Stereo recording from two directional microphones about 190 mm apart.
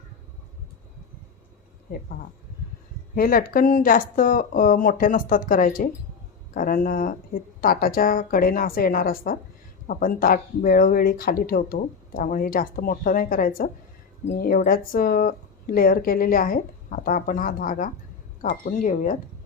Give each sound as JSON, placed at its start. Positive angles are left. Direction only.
{"t": 3.2, "sound": "speech", "side_deg": 50}